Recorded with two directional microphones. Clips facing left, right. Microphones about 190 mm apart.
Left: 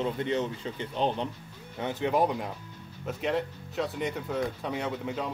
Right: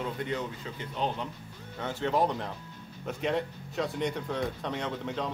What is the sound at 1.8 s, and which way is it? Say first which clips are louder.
Speech: left 2 dB; 15° left (ahead or behind).